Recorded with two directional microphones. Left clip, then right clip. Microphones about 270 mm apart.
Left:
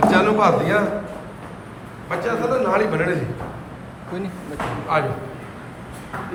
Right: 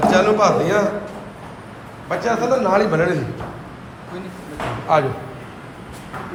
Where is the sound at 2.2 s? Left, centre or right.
Centre.